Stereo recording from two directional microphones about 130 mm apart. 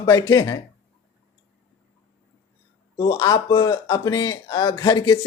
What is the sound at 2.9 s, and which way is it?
Speech, 30° left (ahead or behind).